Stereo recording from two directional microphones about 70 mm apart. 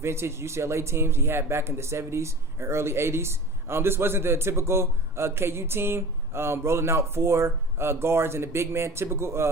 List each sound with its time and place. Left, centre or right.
0.0 s speech: right